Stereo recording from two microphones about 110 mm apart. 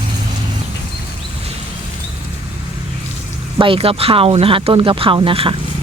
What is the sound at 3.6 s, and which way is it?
Speech, 55° right (ahead or behind).